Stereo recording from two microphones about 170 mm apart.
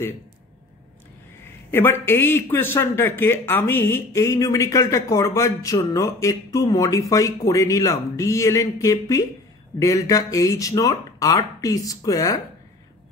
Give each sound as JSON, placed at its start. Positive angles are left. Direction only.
{"t": 1.7, "sound": "speech", "side_deg": 15}